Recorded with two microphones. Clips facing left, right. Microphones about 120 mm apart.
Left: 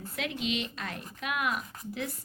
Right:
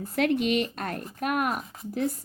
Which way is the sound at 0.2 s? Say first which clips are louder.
Right 9 dB; 55° right (ahead or behind).